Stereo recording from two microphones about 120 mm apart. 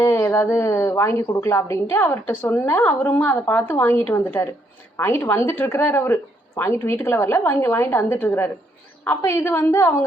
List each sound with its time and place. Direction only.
0.0 s a woman's voice: 20° left (ahead or behind)